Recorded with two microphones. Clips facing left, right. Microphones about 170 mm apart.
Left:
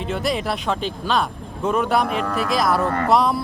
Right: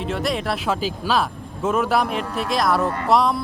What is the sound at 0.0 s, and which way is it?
Speech, centre (ahead or behind).